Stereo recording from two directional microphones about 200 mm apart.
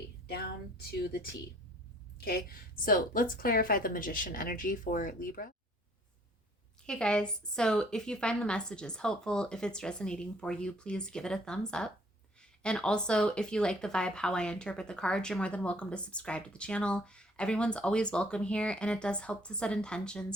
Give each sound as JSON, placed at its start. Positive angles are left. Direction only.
{"t": 2.2, "sound": "a woman's voice", "side_deg": 50}
{"t": 6.8, "sound": "speech", "side_deg": 5}